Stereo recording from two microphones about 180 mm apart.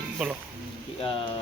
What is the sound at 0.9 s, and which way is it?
Speech, 30° left (ahead or behind).